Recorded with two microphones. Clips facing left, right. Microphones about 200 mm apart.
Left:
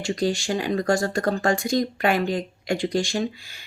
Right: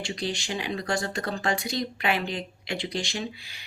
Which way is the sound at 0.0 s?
45° left (ahead or behind).